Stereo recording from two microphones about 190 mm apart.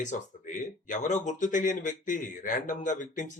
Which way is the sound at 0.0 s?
40° left (ahead or behind).